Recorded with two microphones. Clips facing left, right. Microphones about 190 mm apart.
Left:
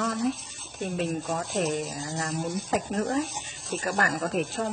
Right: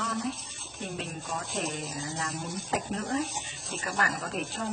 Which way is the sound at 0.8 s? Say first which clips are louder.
Left 8 dB; 45° left (ahead or behind).